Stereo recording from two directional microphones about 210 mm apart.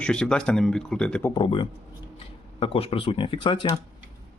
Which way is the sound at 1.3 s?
25° left (ahead or behind).